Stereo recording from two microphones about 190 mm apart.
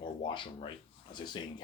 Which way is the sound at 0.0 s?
25° left (ahead or behind).